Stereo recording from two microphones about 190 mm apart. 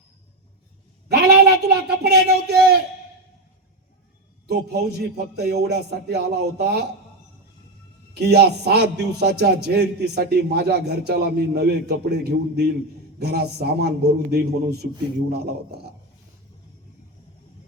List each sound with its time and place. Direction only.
1.1 s a sound: 60° right (ahead or behind)
4.4 s a man's voice: 60° right (ahead or behind)
8.1 s a man's voice: 60° right (ahead or behind)